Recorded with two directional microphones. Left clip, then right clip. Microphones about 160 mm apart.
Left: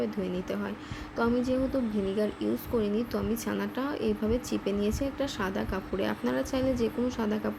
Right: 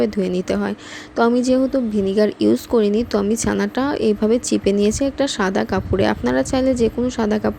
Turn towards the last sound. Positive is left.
turn(degrees=-50)  # may be behind; listen again after turning